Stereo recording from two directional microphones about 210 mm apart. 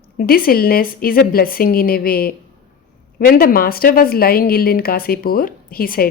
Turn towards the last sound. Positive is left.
turn(degrees=45)  # may be behind; listen again after turning